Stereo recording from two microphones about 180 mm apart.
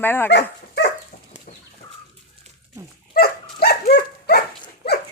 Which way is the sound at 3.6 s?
60° left (ahead or behind).